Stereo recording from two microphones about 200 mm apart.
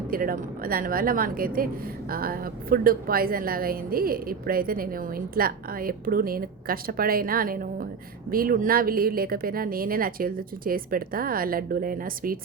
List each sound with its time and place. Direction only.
0.1 s a woman's voice: 45° right (ahead or behind)